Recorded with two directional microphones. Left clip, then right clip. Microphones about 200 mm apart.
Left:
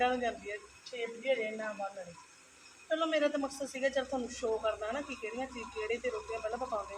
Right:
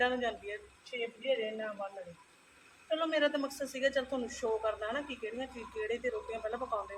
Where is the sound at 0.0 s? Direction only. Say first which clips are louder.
Left 1 dB; 20° right (ahead or behind).